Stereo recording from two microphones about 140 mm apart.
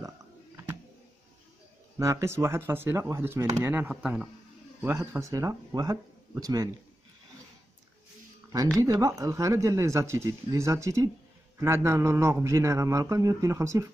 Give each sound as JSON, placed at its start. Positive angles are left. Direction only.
{"t": 2.0, "sound": "speech", "side_deg": -20}
{"t": 4.8, "sound": "speech", "side_deg": -20}
{"t": 8.7, "sound": "speech", "side_deg": -25}